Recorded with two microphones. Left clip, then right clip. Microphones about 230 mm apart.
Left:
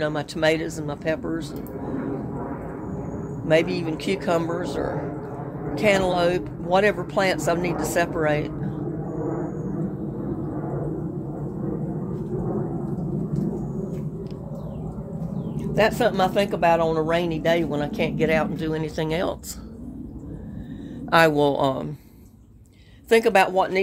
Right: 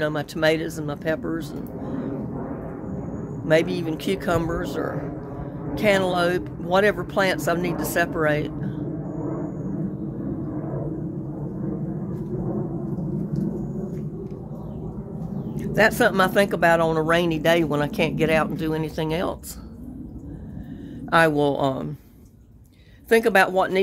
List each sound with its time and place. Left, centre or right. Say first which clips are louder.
0.0 s speech: even; centre
3.4 s speech: even; centre
15.5 s speech: right 2 dB; right
21.1 s speech: left 1 dB; centre
23.0 s speech: even; centre